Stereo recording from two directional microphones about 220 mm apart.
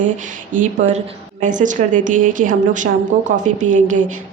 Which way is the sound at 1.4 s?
35° right (ahead or behind).